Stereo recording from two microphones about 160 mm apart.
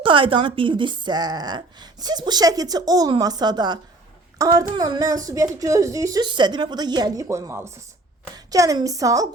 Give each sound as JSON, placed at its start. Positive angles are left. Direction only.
{"t": 0.0, "sound": "a woman's voice", "side_deg": -30}